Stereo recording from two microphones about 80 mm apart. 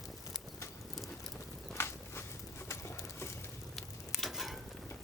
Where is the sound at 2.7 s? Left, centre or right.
Left.